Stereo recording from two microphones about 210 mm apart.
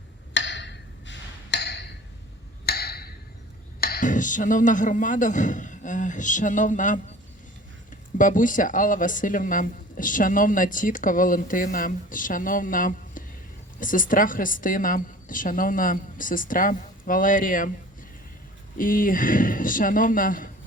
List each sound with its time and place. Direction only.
0.3 s a sound: 60° left (ahead or behind)
3.8 s a man's voice: 45° left (ahead or behind)
8.2 s speech: 40° left (ahead or behind)
18.8 s speech: 40° left (ahead or behind)